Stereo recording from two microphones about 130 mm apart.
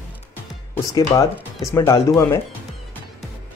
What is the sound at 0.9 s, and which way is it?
Speech, 25° left (ahead or behind).